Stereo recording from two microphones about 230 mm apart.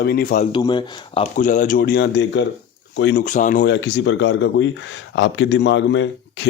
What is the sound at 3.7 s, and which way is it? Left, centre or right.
Speech, left.